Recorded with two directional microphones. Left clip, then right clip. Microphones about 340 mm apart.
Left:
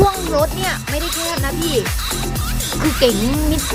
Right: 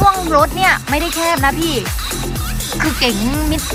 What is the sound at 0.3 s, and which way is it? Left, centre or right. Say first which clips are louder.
Music: right 6 dB; centre.